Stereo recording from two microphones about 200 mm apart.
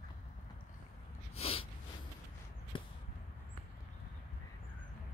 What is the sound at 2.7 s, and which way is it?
Arrow, 25° left (ahead or behind).